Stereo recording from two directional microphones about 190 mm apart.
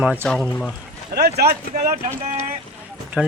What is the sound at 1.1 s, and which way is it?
Speech, 55° right (ahead or behind).